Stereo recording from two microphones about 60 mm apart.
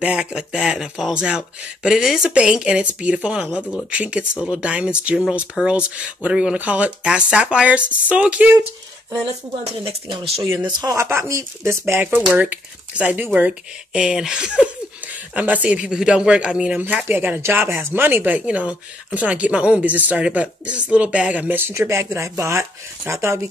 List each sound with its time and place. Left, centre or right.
0.0 s speech: centre
10.5 s speech: right
11.1 s speech: right
12.4 s speech: right
13.9 s speech: centre
16.7 s speech: right
17.4 s speech: right
21.5 s speech: right
21.8 s speech: right